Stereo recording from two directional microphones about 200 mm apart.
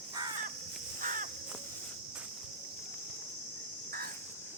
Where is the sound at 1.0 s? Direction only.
40° right (ahead or behind).